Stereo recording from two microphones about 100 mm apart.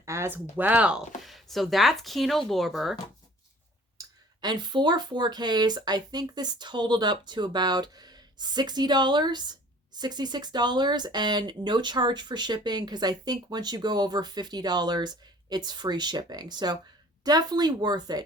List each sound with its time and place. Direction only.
0.0 s speech: 25° right (ahead or behind); by 1.0 s 10° right (ahead or behind)
1.2 s speech: centre (ahead or behind)
4.0 s clicking: 35° right (ahead or behind)
4.4 s speech: 45° right (ahead or behind)